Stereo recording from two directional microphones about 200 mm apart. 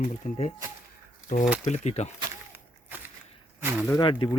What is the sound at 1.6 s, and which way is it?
Speech, 35° left (ahead or behind).